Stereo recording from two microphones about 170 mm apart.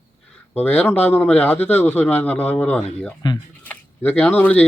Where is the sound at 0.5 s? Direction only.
10° left (ahead or behind).